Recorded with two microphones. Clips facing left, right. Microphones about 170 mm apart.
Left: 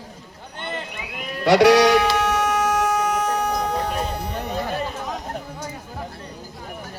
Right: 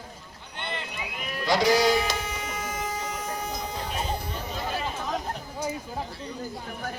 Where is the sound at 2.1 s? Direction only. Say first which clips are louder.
Left 13 dB; 75° left (ahead or behind).